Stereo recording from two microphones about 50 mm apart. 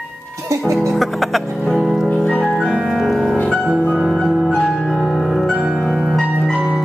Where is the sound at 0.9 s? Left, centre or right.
Centre.